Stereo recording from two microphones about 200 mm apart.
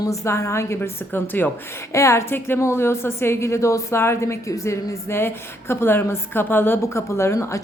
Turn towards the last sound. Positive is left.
turn(degrees=15)  # may be behind; listen again after turning